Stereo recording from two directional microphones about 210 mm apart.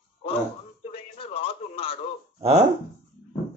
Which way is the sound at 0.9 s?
25° left (ahead or behind).